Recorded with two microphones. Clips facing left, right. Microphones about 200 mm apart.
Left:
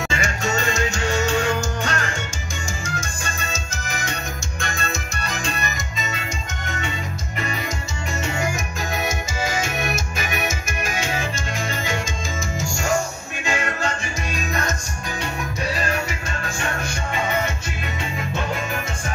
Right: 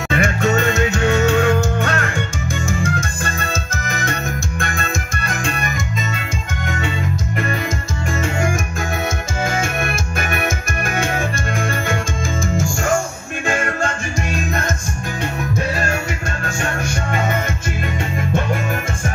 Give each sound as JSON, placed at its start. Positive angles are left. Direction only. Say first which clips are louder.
{"t": 0.1, "sound": "music", "louder": "right 11 dB", "side_deg": -55}
{"t": 9.4, "sound": "music", "louder": "right 4 dB", "side_deg": -55}